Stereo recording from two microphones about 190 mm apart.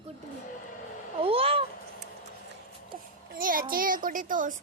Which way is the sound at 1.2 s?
30° right (ahead or behind).